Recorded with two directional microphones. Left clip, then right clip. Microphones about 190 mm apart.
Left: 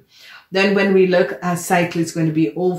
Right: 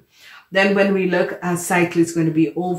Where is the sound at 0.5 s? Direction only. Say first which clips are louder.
Even; 25° left (ahead or behind).